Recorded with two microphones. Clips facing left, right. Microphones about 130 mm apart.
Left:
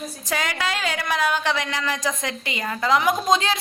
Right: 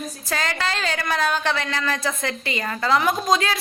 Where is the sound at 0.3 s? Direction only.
10° left (ahead or behind).